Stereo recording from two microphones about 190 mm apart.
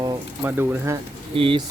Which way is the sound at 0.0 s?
10° right (ahead or behind).